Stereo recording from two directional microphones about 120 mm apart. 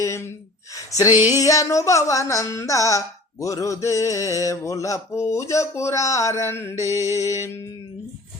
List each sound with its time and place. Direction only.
0.0 s speech: 25° left (ahead or behind)
0.9 s mantra: 30° left (ahead or behind)